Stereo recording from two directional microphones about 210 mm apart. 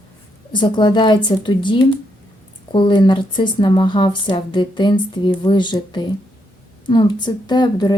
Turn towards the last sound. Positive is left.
turn(degrees=20)  # may be behind; listen again after turning